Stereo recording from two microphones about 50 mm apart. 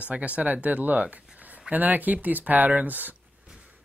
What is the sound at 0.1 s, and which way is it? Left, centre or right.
Speech, right.